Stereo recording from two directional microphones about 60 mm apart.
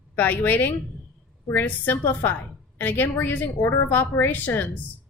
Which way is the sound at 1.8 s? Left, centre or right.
Left.